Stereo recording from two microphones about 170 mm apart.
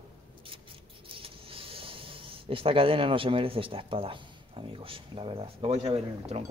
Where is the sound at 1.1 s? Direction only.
35° right (ahead or behind).